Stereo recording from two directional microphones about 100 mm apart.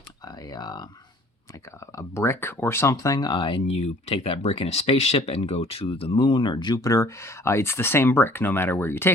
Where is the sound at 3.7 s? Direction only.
90° left.